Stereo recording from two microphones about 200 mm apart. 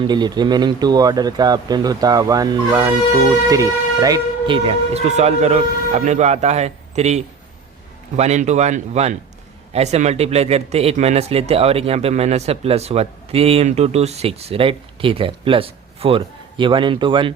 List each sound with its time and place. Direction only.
0.0 s speech: 20° right (ahead or behind)